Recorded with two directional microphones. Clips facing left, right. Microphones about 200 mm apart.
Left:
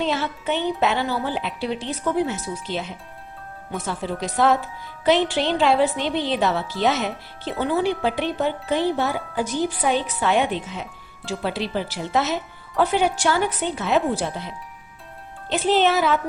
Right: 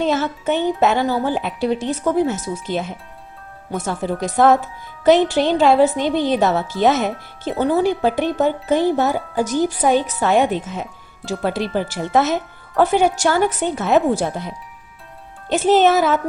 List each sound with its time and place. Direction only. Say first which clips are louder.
0.0 s a woman's voice: right 5 dB; 45° right (ahead or behind)
3.8 s a woman's voice: right 5 dB; 50° right (ahead or behind)